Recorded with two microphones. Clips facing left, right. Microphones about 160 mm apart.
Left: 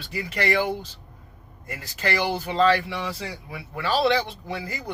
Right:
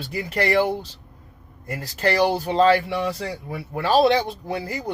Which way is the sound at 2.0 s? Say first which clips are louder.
Right 6 dB; 35° right (ahead or behind).